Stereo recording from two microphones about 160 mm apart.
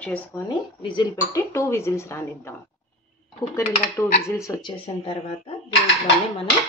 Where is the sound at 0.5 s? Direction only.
30° left (ahead or behind).